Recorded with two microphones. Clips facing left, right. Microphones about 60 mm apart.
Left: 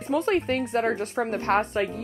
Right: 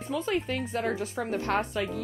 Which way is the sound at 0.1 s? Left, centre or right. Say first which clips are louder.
Left 6 dB; left.